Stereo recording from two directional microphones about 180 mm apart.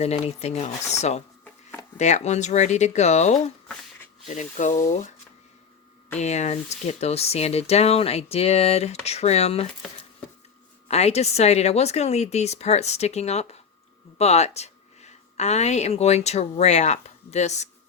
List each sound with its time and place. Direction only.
0.0 s speech: 35° left (ahead or behind)
6.1 s speech: 40° left (ahead or behind)
10.8 s a woman's voice: 35° left (ahead or behind)